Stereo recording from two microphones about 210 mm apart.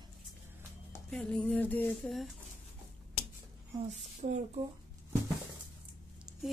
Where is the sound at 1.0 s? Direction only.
5° left (ahead or behind).